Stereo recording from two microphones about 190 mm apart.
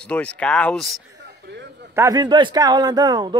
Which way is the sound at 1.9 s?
15° right (ahead or behind).